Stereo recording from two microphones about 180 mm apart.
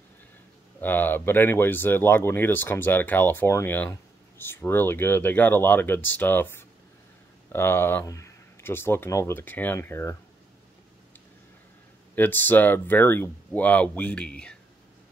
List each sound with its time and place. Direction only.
0.7 s speech: 10° left (ahead or behind)
12.2 s speech: 10° left (ahead or behind)